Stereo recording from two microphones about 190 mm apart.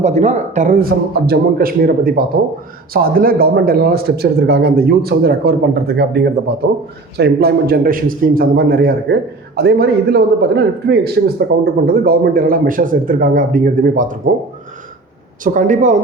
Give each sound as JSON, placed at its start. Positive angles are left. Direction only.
{"t": 0.0, "sound": "a man's voice", "side_deg": -35}
{"t": 15.4, "sound": "a man's voice", "side_deg": -45}